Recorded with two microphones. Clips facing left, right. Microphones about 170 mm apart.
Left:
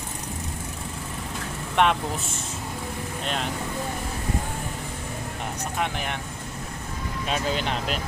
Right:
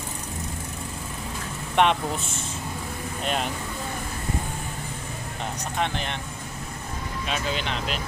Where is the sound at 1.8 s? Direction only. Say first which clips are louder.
Right 1 dB; centre (ahead or behind).